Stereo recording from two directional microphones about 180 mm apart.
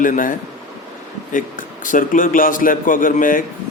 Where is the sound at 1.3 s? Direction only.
45° left (ahead or behind).